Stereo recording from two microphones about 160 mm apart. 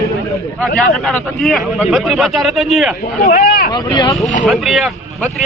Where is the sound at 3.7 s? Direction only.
25° left (ahead or behind).